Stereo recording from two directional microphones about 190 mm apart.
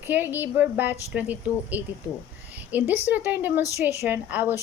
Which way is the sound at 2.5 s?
10° right (ahead or behind).